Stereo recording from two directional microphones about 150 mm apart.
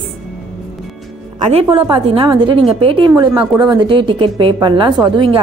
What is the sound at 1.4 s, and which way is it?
A woman's voice, 40° right (ahead or behind).